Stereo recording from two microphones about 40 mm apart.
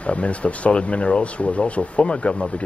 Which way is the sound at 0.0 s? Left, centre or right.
Left.